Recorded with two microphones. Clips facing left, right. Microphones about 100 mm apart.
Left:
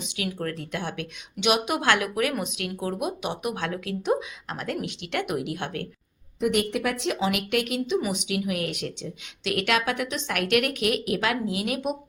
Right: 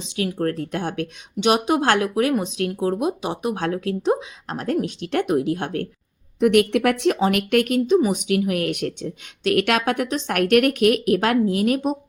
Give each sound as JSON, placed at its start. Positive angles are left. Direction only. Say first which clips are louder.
{"t": 0.0, "sound": "speech", "louder": "right 6 dB", "side_deg": -30}
{"t": 0.3, "sound": "speech", "louder": "right 7 dB", "side_deg": -40}
{"t": 3.5, "sound": "speech", "louder": "right 6 dB", "side_deg": -40}
{"t": 6.4, "sound": "a woman's voice", "louder": "right 8 dB", "side_deg": -60}